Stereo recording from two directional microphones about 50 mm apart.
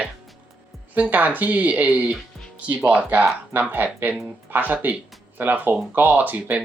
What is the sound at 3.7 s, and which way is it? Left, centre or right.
Speech, right.